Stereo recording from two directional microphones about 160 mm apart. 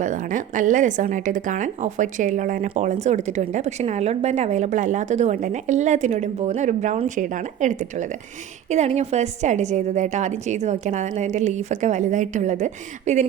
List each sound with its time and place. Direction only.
0.0 s a woman's voice: 55° right (ahead or behind)